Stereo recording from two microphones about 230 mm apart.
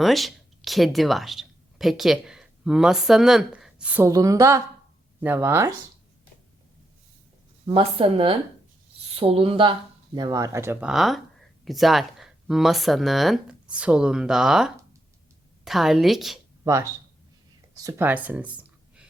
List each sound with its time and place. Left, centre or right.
0.0 s speech: centre
7.7 s speech: right; by 16.4 s centre
16.6 s speech: centre